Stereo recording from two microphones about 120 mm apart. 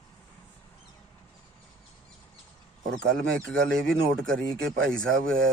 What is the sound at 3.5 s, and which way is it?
Speech, 5° left (ahead or behind).